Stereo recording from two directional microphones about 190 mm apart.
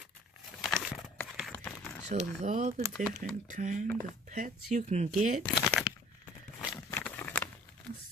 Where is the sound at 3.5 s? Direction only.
40° right (ahead or behind).